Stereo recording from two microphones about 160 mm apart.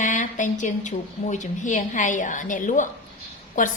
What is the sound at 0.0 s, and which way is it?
A woman's voice, 50° left (ahead or behind).